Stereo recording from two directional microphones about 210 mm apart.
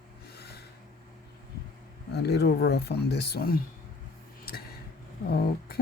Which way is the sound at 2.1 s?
50° left (ahead or behind).